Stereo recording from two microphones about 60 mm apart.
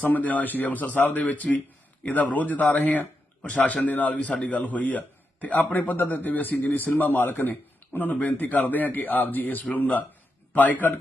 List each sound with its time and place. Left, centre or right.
0.1 s a man's voice: left